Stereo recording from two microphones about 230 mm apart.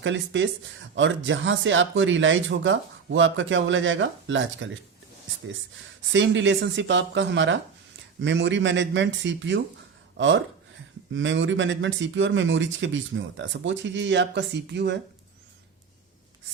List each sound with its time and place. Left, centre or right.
0.0 s speech: right
6.1 s speech: right